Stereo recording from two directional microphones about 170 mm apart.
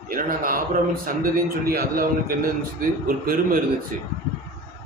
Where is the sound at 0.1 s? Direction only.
55° right (ahead or behind).